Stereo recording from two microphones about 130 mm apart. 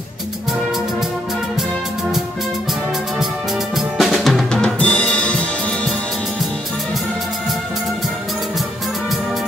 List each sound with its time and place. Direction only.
3.7 s drum: centre (ahead or behind)